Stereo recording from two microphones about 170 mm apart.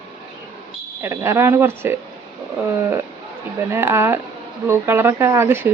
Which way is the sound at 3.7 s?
15° right (ahead or behind).